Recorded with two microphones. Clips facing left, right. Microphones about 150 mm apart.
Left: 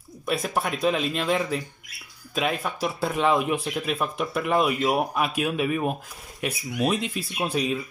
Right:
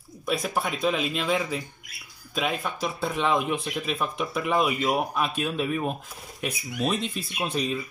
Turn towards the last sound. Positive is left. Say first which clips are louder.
# left 2 dB
turn(degrees=5)  # may be behind; listen again after turning